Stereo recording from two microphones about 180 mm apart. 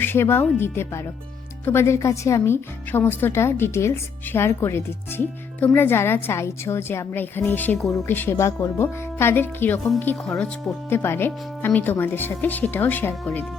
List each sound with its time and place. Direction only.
0.0 s speech: 15° left (ahead or behind)